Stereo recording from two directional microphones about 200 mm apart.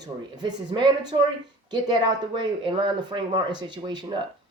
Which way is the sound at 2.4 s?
20° right (ahead or behind).